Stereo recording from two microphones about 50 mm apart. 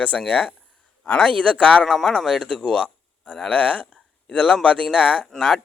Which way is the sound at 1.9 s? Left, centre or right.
Centre.